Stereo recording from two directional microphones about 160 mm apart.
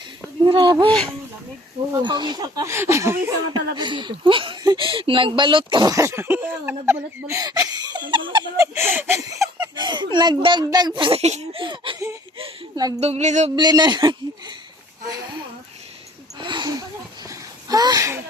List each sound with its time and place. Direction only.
0.4 s speech: 30° right (ahead or behind)
2.0 s speech: 30° right (ahead or behind)
3.8 s speech: 30° right (ahead or behind)
8.1 s a sound: 30° right (ahead or behind)
8.5 s speech: 15° right (ahead or behind)
9.6 s speech: 30° right (ahead or behind); by 11.6 s 45° right (ahead or behind)
11.6 s a sound: 30° right (ahead or behind)
12.4 s a woman's voice: 25° right (ahead or behind)
13.0 s a sound: 40° right (ahead or behind)
13.6 s speech: 25° right (ahead or behind)
16.4 s speech: 30° right (ahead or behind)
17.2 s a sound: 25° right (ahead or behind)